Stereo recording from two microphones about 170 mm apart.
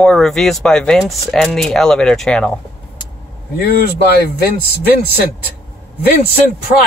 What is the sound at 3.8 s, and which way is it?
Speech, 70° left (ahead or behind).